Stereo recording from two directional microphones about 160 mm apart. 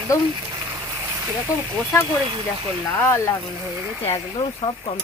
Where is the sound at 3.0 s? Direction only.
15° left (ahead or behind).